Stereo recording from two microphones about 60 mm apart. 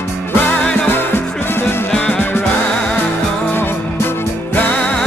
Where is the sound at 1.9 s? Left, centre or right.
Centre.